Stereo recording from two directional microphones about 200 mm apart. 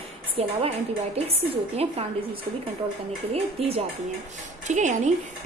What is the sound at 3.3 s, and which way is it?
A woman's voice, 30° right (ahead or behind).